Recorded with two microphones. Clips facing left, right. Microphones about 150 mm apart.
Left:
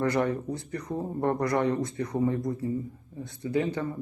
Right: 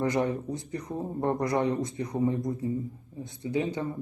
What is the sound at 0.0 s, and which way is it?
Speech, 15° right (ahead or behind).